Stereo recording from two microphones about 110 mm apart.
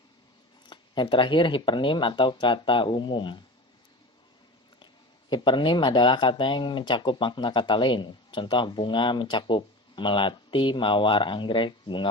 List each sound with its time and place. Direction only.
0.7 s speech: 45° left (ahead or behind)
5.3 s speech: 45° left (ahead or behind)